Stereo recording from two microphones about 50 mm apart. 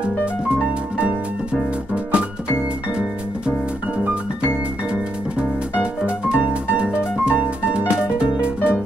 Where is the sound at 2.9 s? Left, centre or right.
Centre.